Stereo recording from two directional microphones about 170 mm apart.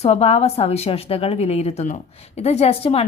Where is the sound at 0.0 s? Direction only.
35° left (ahead or behind).